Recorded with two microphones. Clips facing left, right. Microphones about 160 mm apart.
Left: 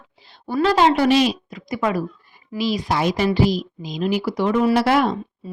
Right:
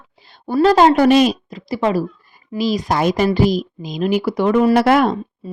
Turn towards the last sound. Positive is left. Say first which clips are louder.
# right 4 dB
turn(degrees=-55)  # may be behind; listen again after turning